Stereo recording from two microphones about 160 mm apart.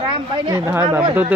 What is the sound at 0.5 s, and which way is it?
Speech, 15° right (ahead or behind).